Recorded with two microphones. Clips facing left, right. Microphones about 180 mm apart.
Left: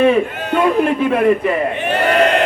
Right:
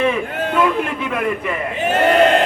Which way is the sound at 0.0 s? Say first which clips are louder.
Left 5 dB; 30° left (ahead or behind).